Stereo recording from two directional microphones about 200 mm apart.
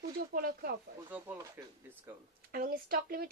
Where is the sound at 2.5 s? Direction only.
50° right (ahead or behind).